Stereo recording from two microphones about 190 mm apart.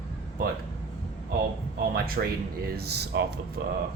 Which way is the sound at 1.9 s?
50° right (ahead or behind).